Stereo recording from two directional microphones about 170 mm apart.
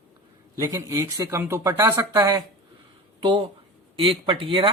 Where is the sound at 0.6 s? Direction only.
15° right (ahead or behind).